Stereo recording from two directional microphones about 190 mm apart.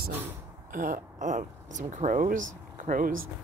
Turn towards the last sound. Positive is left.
turn(degrees=-45)  # may be behind; listen again after turning